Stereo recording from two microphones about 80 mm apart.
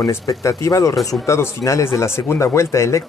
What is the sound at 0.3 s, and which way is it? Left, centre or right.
Speech, left.